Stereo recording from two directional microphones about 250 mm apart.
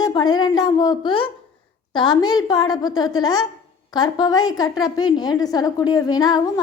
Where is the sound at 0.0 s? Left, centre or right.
Centre.